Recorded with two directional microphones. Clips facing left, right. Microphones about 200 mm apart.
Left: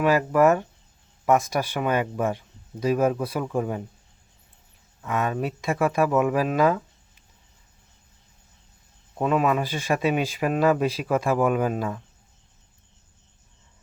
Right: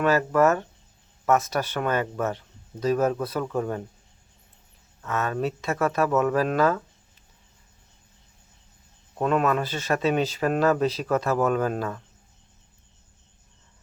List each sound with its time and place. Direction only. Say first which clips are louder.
0.0 s speech: left 1 dB; 10° left (ahead or behind)
5.0 s speech: left 1 dB; 15° left (ahead or behind)
9.1 s speech: left 1 dB; 5° left (ahead or behind)